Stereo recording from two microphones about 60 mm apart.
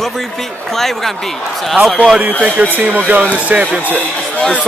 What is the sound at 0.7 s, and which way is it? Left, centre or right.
Speech, centre.